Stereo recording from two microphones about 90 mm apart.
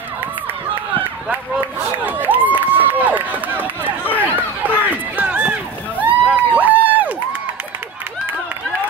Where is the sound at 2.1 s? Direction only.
20° right (ahead or behind).